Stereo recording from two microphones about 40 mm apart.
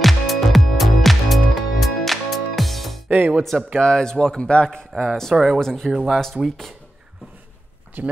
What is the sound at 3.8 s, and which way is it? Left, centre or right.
Speech, centre.